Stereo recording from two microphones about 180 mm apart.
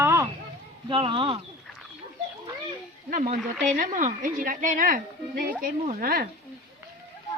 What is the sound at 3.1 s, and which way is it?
Speech, 45° right (ahead or behind).